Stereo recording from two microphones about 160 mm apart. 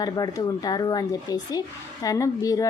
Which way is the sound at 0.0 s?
25° left (ahead or behind).